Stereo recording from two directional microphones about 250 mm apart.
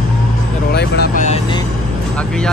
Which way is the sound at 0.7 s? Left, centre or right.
Left.